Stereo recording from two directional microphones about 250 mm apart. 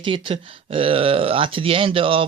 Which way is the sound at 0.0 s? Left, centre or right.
Right.